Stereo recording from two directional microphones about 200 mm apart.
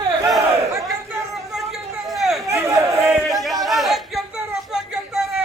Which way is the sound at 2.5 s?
15° right (ahead or behind).